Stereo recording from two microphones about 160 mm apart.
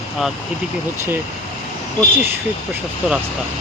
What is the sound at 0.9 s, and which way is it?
Speech, 15° right (ahead or behind).